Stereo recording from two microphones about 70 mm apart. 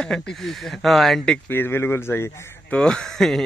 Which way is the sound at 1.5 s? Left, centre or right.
Left.